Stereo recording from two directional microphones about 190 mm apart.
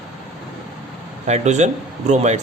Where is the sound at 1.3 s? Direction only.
40° right (ahead or behind).